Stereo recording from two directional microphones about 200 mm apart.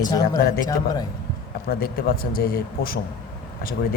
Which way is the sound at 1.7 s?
45° left (ahead or behind).